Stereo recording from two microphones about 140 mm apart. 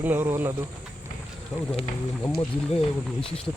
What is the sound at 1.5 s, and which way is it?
Speech, 5° left (ahead or behind).